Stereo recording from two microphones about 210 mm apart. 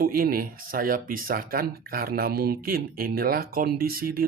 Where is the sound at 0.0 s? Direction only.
45° right (ahead or behind).